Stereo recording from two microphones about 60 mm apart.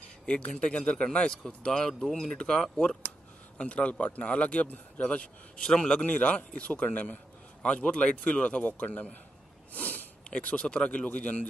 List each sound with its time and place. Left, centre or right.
0.3 s a man's voice: centre
6.0 s a man's voice: left